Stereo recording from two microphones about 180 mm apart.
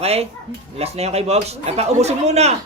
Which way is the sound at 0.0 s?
35° right (ahead or behind).